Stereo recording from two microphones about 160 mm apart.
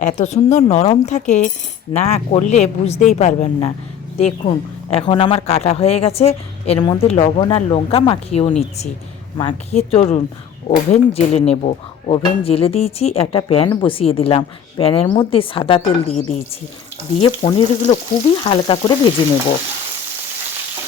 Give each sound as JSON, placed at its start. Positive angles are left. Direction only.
{"t": 0.0, "sound": "speech", "side_deg": 45}